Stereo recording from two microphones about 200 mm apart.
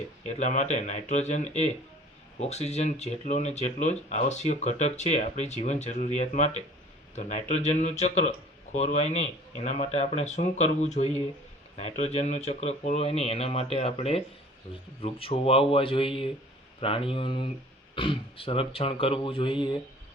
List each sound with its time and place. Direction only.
0.3 s speech: 35° left (ahead or behind)